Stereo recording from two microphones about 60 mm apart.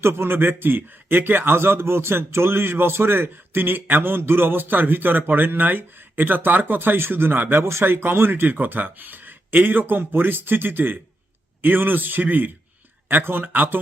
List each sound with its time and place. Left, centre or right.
0.0 s a man's voice: right
7.6 s a man's voice: right